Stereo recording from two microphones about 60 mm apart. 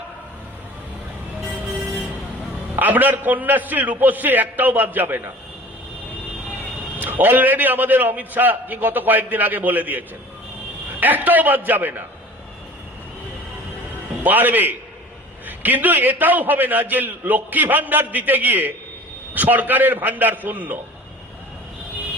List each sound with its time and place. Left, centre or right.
2.7 s a man's voice: right
7.0 s a man's voice: right
11.0 s a man's voice: right
14.3 s a man's voice: right